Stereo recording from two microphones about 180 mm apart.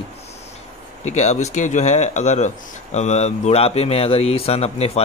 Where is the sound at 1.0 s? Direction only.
40° left (ahead or behind).